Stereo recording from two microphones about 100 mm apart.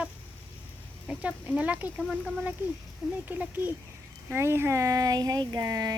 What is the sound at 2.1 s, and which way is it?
Speech, 5° right (ahead or behind).